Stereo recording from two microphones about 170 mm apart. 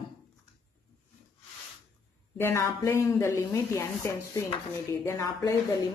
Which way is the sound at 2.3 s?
15° left (ahead or behind).